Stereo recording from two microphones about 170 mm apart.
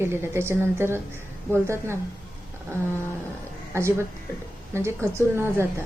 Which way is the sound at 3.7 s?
15° right (ahead or behind).